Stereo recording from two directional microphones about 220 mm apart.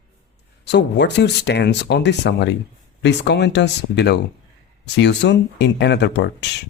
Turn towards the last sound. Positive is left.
turn(degrees=50)  # may be behind; listen again after turning